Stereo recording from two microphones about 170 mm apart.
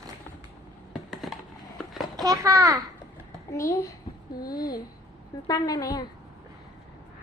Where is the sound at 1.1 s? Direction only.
Centre (ahead or behind).